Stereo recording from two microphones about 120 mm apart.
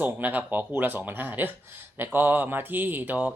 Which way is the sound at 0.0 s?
15° right (ahead or behind).